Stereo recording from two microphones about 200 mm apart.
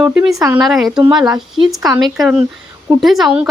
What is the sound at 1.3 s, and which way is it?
Speech, 25° right (ahead or behind).